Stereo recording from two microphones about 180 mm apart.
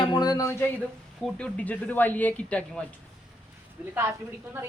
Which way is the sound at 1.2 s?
5° left (ahead or behind).